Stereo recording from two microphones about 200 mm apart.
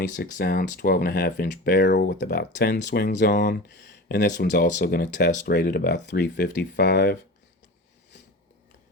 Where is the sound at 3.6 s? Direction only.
60° left (ahead or behind).